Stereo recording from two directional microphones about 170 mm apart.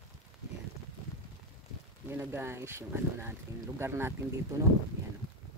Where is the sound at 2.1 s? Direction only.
15° right (ahead or behind).